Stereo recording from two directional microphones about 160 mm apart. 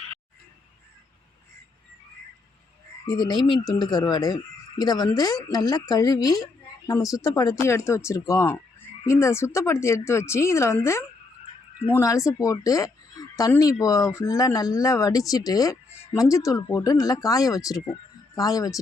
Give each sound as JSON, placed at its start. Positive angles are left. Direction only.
{"t": 3.1, "sound": "speech", "side_deg": 25}